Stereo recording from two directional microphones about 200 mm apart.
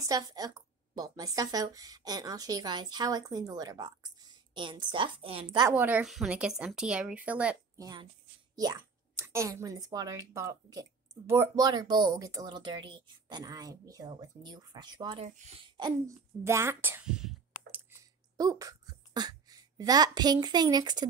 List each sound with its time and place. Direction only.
0.0 s speech: 20° right (ahead or behind)
5.8 s speech: 10° right (ahead or behind)
7.8 s speech: 20° right (ahead or behind)
15.2 s speech: 35° right (ahead or behind)
15.8 s a sound: 15° right (ahead or behind)
18.4 s speech: 20° right (ahead or behind)